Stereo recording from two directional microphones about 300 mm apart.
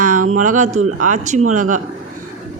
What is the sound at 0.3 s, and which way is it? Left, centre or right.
Speech, right.